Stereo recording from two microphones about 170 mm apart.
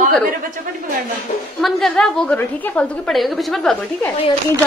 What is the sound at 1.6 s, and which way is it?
A woman's voice, centre (ahead or behind).